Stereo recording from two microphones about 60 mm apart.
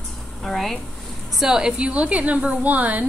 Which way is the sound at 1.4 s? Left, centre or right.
Centre.